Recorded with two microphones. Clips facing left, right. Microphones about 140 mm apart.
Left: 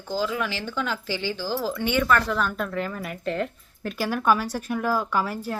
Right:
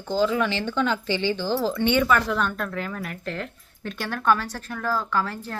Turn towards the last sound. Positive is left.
turn(degrees=10)  # may be behind; listen again after turning